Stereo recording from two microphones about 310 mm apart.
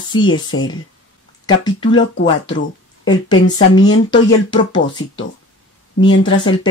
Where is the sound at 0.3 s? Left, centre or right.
Left.